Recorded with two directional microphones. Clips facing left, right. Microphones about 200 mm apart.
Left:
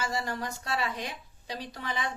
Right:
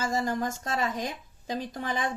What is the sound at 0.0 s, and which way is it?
A woman's voice, 45° right (ahead or behind).